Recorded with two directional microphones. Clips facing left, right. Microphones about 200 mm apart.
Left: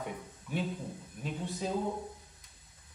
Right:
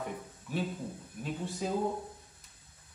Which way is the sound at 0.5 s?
Centre (ahead or behind).